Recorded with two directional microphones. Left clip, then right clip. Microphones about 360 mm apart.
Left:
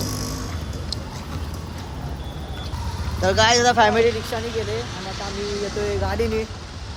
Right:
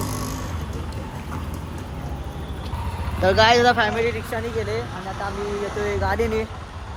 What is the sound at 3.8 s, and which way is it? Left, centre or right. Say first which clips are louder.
Speech: left 5 dB; centre.